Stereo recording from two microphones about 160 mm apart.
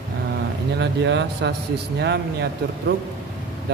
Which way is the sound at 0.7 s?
90° right.